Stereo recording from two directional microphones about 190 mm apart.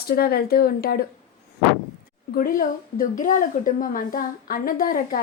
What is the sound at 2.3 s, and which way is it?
A woman's voice, 50° left (ahead or behind).